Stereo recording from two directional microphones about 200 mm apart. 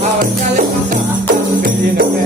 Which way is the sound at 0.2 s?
40° right (ahead or behind).